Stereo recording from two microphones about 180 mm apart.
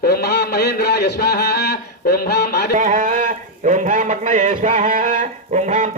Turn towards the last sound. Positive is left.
turn(degrees=-40)  # may be behind; listen again after turning